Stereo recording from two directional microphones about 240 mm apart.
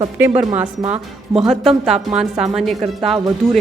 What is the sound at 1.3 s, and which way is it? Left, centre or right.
Speech, centre.